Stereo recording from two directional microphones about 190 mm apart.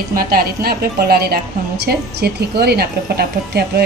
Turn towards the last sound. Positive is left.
turn(degrees=-55)  # may be behind; listen again after turning